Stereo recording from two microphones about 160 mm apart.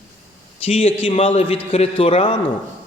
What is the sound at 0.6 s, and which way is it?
A man's voice, 40° left (ahead or behind).